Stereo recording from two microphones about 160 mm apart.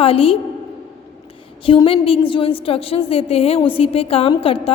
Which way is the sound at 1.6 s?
30° left (ahead or behind).